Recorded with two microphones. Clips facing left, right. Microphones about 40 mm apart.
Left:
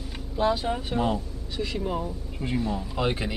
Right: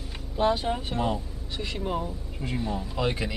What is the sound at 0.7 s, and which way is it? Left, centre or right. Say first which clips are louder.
Speech: left 2 dB; centre.